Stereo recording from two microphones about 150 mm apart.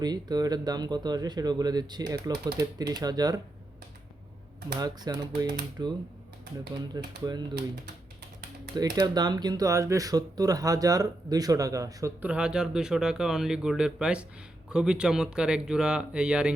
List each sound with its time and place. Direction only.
0.0 s speech: 25° right (ahead or behind)
4.8 s speech: 25° right (ahead or behind)
8.7 s speech: 25° right (ahead or behind)
12.2 s speech: 5° right (ahead or behind)